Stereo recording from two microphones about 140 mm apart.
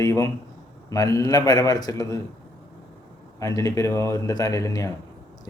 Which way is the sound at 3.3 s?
25° left (ahead or behind).